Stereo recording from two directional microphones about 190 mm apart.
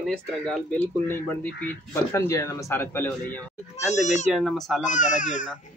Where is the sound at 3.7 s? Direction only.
35° left (ahead or behind).